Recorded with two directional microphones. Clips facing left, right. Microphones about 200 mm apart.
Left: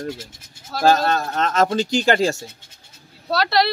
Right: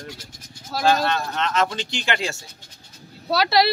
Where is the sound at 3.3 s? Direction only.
Centre (ahead or behind).